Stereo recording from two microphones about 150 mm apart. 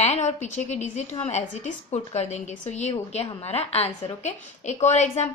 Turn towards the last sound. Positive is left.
turn(degrees=50)  # may be behind; listen again after turning